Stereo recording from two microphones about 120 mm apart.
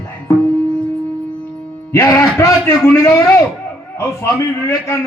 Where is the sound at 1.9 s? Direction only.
25° left (ahead or behind).